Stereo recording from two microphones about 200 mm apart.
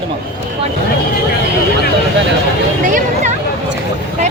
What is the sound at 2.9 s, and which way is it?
Speech, 40° right (ahead or behind).